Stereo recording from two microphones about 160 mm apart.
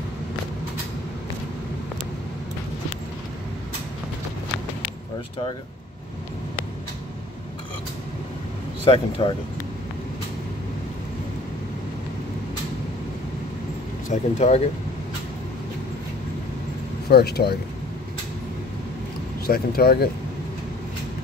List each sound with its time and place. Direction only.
8.8 s speech: 30° left (ahead or behind)
14.0 s speech: 50° left (ahead or behind)
17.1 s speech: 80° left
19.4 s speech: 70° left (ahead or behind)